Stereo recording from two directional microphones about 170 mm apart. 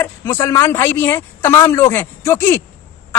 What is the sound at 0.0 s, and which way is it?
Speech, 15° left (ahead or behind).